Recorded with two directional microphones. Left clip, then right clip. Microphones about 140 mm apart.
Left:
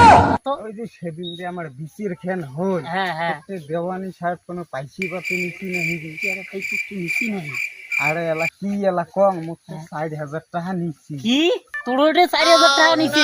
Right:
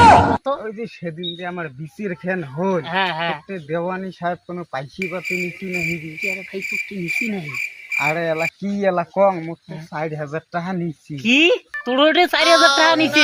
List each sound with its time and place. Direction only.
0.0 s a sound: centre (ahead or behind)
0.5 s speech: 10° right (ahead or behind)
3.7 s insect: 5° right (ahead or behind)
11.3 s speech: 35° right (ahead or behind)
12.4 s insect: centre (ahead or behind)